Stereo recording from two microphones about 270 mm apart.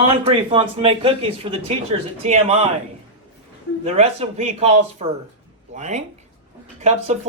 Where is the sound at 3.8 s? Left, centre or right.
Right.